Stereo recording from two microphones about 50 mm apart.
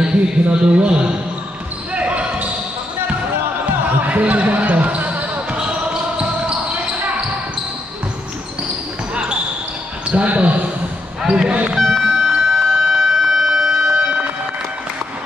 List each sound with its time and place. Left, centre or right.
0.0 s speech: right
2.0 s a sound: right
4.0 s basketball bounce: right
5.6 s basketball bounce: right
9.1 s basketball bounce: right
10.0 s speech: right
11.2 s basketball bounce: centre
11.7 s vehicle: centre
12.3 s a sound: centre